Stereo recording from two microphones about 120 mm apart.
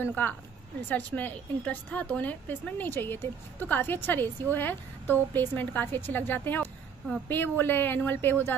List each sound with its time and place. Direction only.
0.0 s a woman's voice: 15° left (ahead or behind)